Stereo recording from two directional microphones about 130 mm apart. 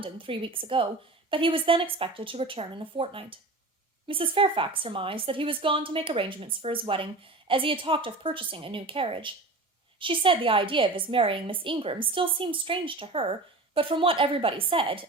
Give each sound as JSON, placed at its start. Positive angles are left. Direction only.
{"t": 0.0, "sound": "a woman's voice", "side_deg": -40}